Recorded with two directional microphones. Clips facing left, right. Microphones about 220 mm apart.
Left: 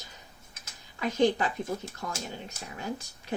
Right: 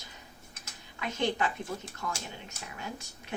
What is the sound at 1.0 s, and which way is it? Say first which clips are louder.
Speech: left 6 dB; 35° left (ahead or behind).